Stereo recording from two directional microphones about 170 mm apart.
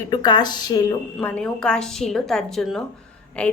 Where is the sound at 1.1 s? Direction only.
5° left (ahead or behind).